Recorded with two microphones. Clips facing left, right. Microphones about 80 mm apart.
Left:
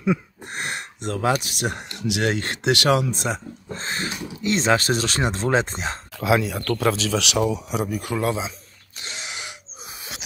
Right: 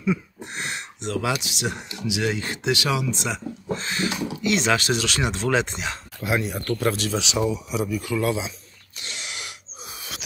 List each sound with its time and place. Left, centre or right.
0.0 s speech: left
6.3 s speech: left
9.0 s throat clearing: left